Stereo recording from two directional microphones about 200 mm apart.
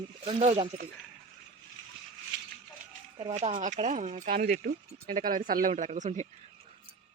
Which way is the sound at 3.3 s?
35° right (ahead or behind).